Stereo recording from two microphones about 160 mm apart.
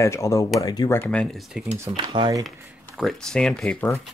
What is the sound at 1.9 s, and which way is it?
Speech, 30° right (ahead or behind).